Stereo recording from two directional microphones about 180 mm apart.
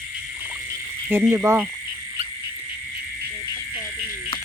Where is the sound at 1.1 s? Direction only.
15° right (ahead or behind).